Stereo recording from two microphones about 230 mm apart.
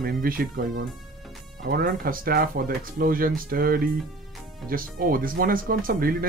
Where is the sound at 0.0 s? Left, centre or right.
Right.